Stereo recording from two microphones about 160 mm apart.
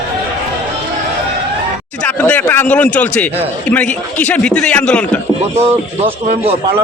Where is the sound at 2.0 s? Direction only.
10° left (ahead or behind).